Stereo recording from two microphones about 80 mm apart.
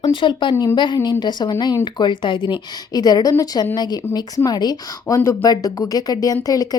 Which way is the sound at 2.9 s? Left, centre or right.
Left.